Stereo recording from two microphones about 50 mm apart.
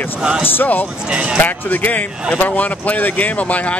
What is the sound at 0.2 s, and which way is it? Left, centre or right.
Speech, centre.